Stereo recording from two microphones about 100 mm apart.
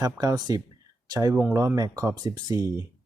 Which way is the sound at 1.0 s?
40° right (ahead or behind).